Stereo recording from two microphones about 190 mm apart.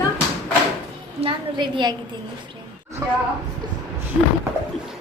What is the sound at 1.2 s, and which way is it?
Speech, 25° right (ahead or behind).